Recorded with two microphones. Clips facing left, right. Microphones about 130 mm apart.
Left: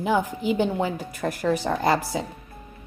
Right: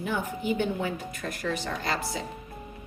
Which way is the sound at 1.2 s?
65° left (ahead or behind).